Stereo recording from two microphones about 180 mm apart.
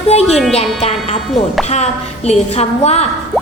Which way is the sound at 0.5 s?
35° left (ahead or behind).